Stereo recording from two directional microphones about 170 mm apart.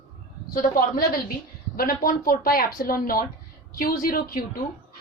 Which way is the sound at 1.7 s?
60° left (ahead or behind).